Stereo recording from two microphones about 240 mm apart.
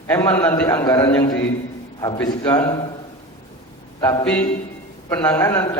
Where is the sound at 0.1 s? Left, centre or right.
Centre.